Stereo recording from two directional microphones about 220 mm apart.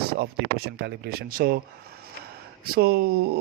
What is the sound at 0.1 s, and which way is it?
Speech, 45° right (ahead or behind).